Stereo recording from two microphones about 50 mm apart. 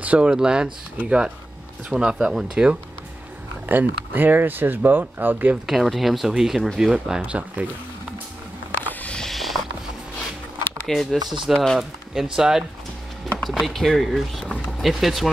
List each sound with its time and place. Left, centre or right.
0.0 s a sound: right
0.3 s speech: centre
3.6 s speech: right
5.7 s speech: centre
7.2 s speech: right
9.3 s a sound: centre
10.9 s speech: centre
13.4 s speech: centre